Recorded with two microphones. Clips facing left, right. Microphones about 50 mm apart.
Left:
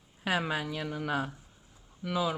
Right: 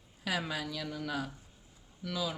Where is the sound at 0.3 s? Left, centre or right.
Left.